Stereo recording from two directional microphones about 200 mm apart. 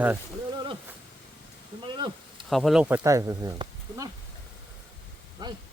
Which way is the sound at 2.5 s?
Centre (ahead or behind).